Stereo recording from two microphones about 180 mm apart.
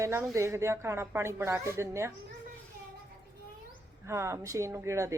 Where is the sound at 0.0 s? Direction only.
15° right (ahead or behind).